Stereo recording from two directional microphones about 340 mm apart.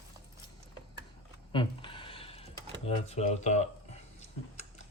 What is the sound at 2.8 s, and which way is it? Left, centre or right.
Speech, centre.